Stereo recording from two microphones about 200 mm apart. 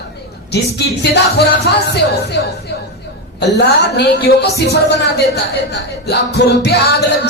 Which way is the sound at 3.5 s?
55° left (ahead or behind).